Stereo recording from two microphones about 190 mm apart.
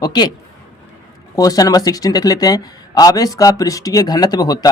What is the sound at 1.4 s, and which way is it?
Speech, 20° left (ahead or behind).